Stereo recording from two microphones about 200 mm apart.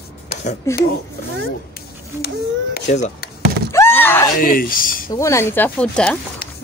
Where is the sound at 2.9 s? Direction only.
40° left (ahead or behind).